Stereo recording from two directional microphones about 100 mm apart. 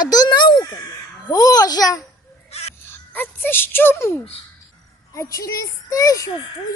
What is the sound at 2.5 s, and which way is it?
Owl, 90° left.